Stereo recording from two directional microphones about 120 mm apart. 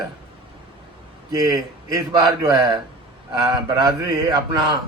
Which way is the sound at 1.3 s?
35° right (ahead or behind).